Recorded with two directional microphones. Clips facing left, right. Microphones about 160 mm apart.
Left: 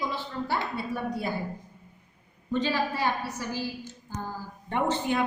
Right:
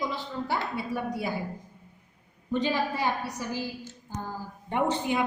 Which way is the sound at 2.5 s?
15° right (ahead or behind).